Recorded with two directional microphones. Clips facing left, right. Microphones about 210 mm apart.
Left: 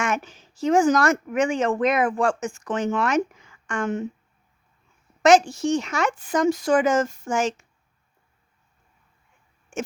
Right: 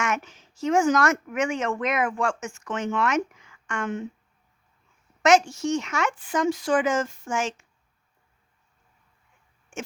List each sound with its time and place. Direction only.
0.0 s speech: 30° left (ahead or behind)
5.2 s speech: 35° left (ahead or behind)